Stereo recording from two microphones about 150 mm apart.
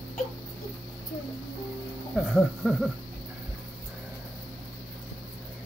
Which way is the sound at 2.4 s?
Centre (ahead or behind).